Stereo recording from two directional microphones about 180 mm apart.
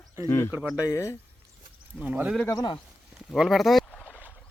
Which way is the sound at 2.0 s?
10° right (ahead or behind).